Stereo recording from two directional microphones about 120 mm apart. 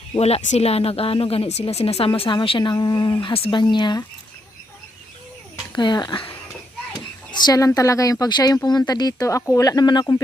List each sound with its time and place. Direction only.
0.2 s speech: 60° left (ahead or behind); by 4.0 s 40° left (ahead or behind)
5.7 s speech: 40° left (ahead or behind)